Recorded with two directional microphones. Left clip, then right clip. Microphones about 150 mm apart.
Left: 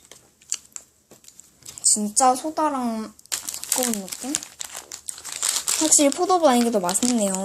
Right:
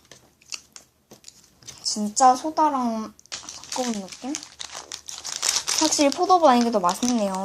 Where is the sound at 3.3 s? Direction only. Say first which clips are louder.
Left 4 dB; 65° left (ahead or behind).